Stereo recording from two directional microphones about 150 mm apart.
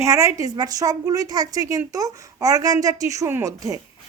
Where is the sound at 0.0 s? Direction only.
20° right (ahead or behind).